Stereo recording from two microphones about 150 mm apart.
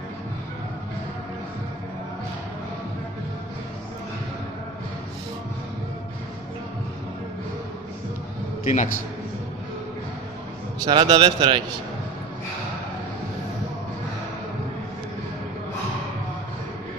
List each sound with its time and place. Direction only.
8.6 s a man's voice: 55° left (ahead or behind)
10.9 s a man's voice: 30° right (ahead or behind)